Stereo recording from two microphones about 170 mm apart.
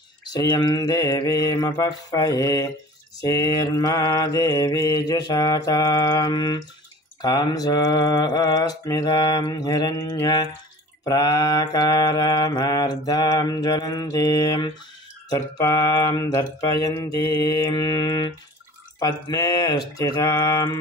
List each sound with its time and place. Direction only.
0.3 s mantra: 25° left (ahead or behind)